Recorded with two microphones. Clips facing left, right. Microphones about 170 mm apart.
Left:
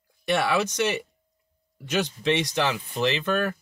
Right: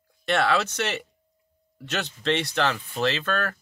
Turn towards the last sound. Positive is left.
turn(degrees=15)  # may be behind; listen again after turning